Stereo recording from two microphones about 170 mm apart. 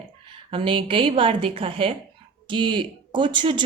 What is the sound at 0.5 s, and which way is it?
A woman's voice, 30° right (ahead or behind).